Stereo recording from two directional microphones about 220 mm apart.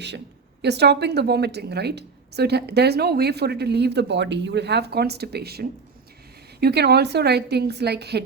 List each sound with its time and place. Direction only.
0.6 s a woman's voice: 50° right (ahead or behind)